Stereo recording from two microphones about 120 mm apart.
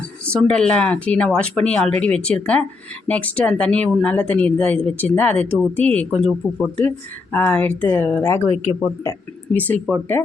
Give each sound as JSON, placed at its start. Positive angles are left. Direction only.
{"t": 0.3, "sound": "speech", "side_deg": 5}
{"t": 7.3, "sound": "speech", "side_deg": 15}